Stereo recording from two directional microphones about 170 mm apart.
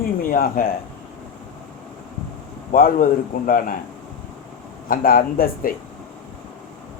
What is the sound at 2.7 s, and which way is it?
A man's voice, 55° left (ahead or behind).